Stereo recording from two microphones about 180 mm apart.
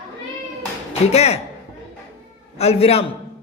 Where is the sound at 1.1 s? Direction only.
35° left (ahead or behind).